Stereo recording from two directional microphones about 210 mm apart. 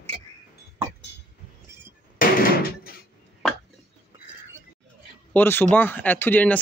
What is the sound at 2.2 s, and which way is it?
Door, 45° left (ahead or behind).